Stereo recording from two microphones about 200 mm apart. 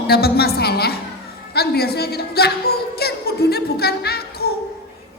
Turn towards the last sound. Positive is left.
turn(degrees=50)  # may be behind; listen again after turning